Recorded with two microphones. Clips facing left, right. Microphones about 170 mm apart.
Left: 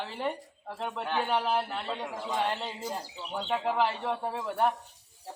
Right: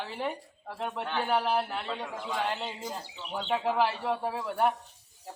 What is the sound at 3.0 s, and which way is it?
Speech, 40° left (ahead or behind).